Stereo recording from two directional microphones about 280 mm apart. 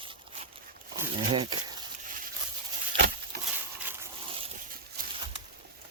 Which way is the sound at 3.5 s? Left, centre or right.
Centre.